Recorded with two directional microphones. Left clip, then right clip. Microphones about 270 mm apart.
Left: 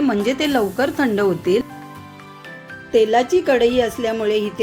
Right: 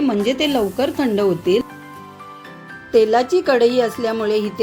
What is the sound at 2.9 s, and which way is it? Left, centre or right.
A woman's voice, centre.